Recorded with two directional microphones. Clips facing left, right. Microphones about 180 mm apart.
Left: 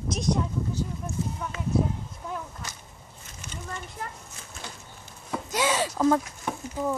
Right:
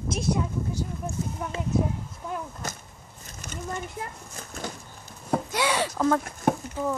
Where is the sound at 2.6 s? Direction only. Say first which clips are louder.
Right 6 dB; 45° right (ahead or behind).